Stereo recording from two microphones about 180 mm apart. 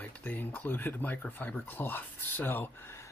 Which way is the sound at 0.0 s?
10° left (ahead or behind).